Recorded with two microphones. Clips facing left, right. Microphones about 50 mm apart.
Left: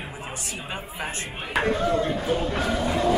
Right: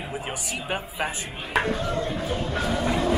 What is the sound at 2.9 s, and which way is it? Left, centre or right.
Vehicle, centre.